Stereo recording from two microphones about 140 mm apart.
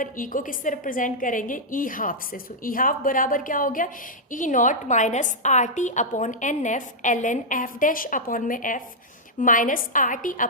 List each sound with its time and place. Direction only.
0.0 s a woman's voice: 75° left (ahead or behind)